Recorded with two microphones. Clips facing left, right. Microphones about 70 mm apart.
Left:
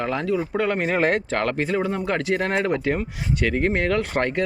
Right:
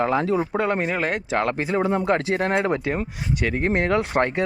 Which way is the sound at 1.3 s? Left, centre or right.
Centre.